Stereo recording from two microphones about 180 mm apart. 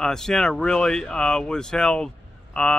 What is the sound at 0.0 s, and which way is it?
Speech, 5° left (ahead or behind).